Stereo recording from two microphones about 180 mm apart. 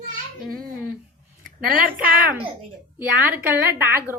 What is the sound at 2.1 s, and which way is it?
Speech, 55° right (ahead or behind).